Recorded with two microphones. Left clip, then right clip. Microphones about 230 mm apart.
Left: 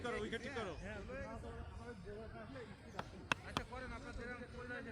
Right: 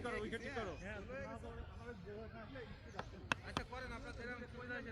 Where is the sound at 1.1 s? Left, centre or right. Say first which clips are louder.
Even; centre.